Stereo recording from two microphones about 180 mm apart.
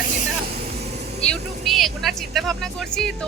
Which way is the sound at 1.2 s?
5° left (ahead or behind).